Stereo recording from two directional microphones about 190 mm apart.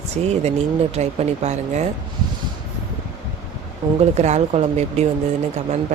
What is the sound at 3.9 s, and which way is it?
Speech, 35° right (ahead or behind).